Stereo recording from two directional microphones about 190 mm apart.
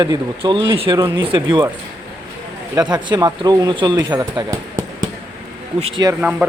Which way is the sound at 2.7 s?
20° right (ahead or behind).